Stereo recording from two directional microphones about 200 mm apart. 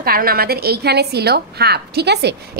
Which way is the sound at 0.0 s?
50° right (ahead or behind).